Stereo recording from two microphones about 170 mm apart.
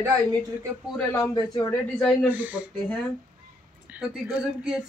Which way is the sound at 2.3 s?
10° right (ahead or behind).